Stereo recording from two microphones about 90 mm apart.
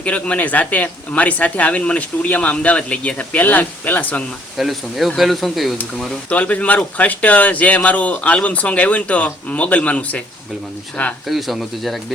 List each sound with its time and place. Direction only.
0.0 s speech: 15° left (ahead or behind)
4.5 s speech: centre (ahead or behind)
6.2 s speech: 15° left (ahead or behind)
11.3 s speech: centre (ahead or behind)